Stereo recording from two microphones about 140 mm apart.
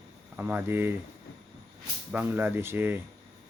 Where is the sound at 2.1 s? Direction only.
15° right (ahead or behind).